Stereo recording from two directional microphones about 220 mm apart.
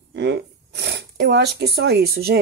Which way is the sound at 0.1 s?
50° right (ahead or behind).